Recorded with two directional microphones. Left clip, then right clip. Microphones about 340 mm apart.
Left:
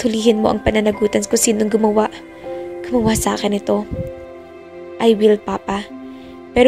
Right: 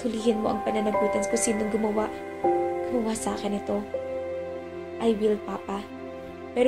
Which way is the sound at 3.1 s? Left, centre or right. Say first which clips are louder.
Left 11 dB; left.